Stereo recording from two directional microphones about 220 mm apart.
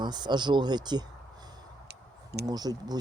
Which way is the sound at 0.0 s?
20° right (ahead or behind).